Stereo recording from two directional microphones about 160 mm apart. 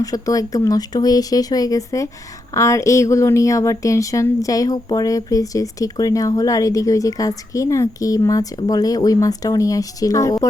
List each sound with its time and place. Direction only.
0.0 s speech: 20° left (ahead or behind)